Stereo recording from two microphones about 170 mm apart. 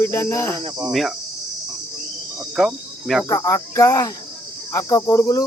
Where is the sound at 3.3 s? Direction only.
20° left (ahead or behind).